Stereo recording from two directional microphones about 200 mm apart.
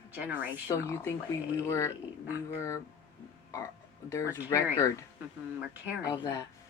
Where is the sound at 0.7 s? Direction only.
15° left (ahead or behind).